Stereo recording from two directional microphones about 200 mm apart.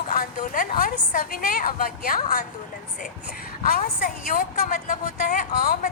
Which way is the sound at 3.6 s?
50° left (ahead or behind).